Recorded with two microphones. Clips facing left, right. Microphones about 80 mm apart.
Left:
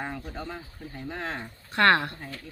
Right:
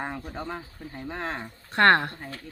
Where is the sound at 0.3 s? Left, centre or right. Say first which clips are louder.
Right 2 dB; right.